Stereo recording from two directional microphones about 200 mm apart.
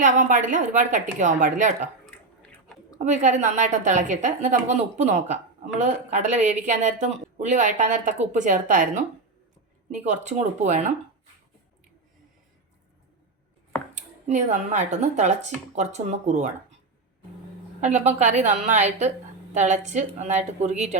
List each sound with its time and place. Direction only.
0.0 s a woman's voice: 40° right (ahead or behind)
2.0 s chewing: 5° left (ahead or behind)
3.0 s a woman's voice: 35° right (ahead or behind)
9.9 s a woman's voice: 35° right (ahead or behind)
13.9 s a woman's voice: 35° right (ahead or behind)
17.7 s a woman's voice: 35° right (ahead or behind)